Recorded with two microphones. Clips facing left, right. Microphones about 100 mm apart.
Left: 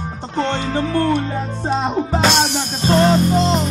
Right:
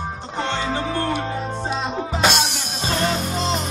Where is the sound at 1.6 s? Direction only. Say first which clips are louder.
Left 8 dB; 50° left (ahead or behind).